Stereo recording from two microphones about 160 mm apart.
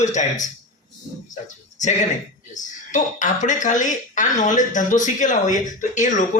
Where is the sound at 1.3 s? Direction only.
50° left (ahead or behind).